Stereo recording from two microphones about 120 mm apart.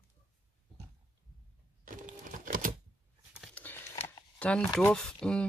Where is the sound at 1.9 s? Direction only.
90° right.